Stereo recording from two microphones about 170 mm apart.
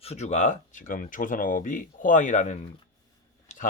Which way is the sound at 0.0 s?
40° left (ahead or behind).